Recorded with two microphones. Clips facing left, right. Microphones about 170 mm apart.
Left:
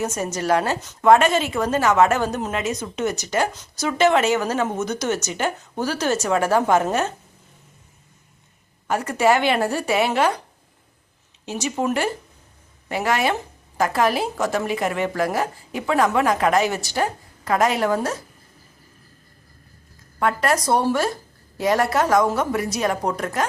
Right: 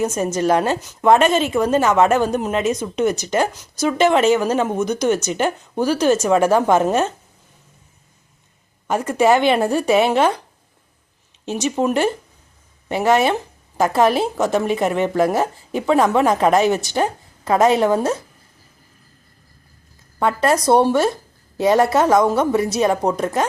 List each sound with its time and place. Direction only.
0.0 s a woman's voice: 15° right (ahead or behind)
8.9 s a woman's voice: 20° right (ahead or behind)
11.4 s a woman's voice: 20° right (ahead or behind)
20.1 s a woman's voice: 25° right (ahead or behind)